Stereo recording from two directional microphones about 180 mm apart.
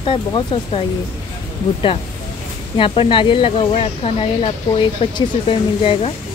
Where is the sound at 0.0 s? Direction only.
30° left (ahead or behind).